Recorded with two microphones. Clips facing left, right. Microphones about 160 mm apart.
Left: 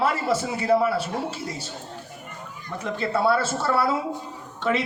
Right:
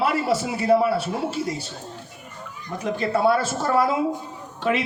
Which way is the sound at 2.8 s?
15° right (ahead or behind).